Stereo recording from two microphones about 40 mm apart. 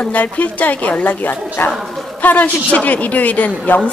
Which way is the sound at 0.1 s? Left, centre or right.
Left.